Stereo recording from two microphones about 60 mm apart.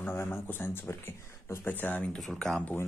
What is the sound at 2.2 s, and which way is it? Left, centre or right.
Speech, centre.